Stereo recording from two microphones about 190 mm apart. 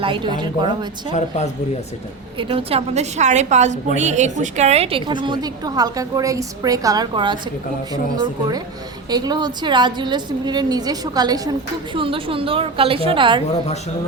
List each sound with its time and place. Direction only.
0.0 s a woman's voice: 25° right (ahead or behind)
2.4 s a woman's voice: 30° right (ahead or behind)